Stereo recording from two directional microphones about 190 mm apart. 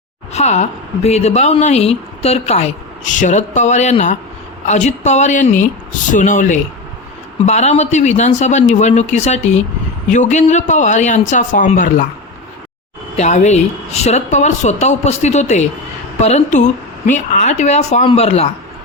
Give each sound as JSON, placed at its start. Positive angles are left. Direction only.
{"t": 0.3, "sound": "speech", "side_deg": 35}
{"t": 13.1, "sound": "speech", "side_deg": 35}